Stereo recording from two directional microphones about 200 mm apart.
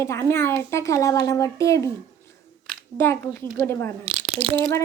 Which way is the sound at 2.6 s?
10° left (ahead or behind).